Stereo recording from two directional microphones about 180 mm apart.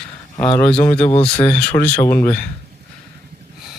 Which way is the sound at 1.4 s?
5° left (ahead or behind).